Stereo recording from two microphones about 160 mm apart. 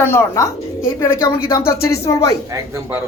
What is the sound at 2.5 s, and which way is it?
Speech, 20° right (ahead or behind).